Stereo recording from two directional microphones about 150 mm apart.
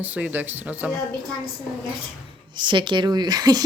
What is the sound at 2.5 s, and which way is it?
A woman's voice, 30° right (ahead or behind).